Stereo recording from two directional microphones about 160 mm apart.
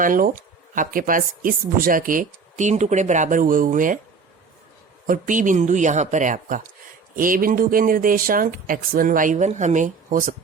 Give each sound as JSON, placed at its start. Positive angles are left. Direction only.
{"t": 0.0, "sound": "speech", "side_deg": -55}
{"t": 5.0, "sound": "speech", "side_deg": -55}